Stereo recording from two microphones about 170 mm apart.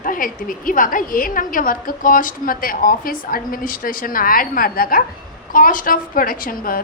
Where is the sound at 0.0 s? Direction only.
55° left (ahead or behind).